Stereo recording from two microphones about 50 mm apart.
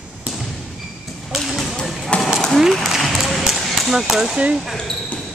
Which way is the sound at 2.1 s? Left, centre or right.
Left.